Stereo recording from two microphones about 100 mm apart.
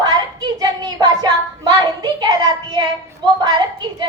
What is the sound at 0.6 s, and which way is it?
A woman's voice, 40° right (ahead or behind).